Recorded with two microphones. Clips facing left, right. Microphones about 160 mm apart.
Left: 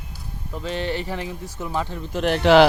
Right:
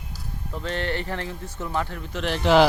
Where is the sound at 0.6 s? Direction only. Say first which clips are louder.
Left 2 dB; 15° left (ahead or behind).